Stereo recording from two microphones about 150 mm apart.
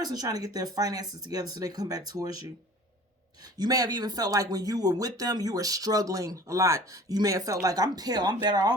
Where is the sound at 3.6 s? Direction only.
25° right (ahead or behind).